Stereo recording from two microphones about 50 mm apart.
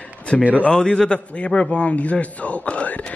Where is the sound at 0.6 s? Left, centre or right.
Centre.